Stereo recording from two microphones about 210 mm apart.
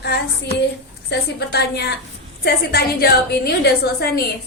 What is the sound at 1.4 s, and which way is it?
A woman's voice, 50° left (ahead or behind).